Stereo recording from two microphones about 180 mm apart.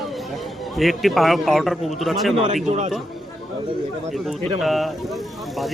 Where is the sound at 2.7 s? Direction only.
40° right (ahead or behind).